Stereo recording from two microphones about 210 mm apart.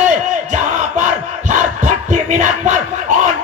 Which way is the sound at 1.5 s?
35° right (ahead or behind).